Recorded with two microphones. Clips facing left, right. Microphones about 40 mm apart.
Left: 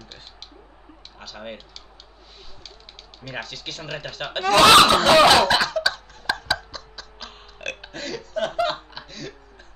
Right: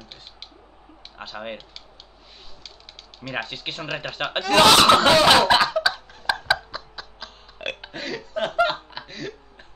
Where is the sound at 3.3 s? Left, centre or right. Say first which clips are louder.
Right 3 dB; right.